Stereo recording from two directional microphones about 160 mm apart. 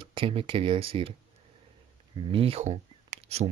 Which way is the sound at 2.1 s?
30° right (ahead or behind).